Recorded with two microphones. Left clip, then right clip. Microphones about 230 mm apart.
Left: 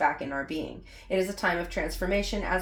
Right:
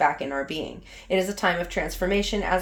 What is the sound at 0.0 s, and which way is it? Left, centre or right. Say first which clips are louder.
Speech: right 4 dB; right.